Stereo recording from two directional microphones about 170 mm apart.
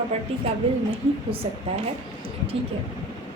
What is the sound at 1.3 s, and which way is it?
Speech, 35° right (ahead or behind).